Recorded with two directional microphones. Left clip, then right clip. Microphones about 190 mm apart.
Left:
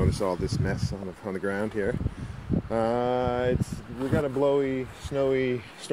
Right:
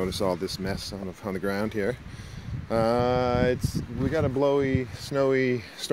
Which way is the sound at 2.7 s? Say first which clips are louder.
Right 2 dB; 40° right (ahead or behind).